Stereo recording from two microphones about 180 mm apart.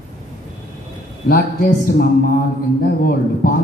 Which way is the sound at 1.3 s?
50° left (ahead or behind).